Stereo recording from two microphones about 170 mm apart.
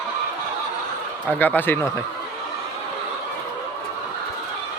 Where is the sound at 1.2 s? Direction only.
10° left (ahead or behind).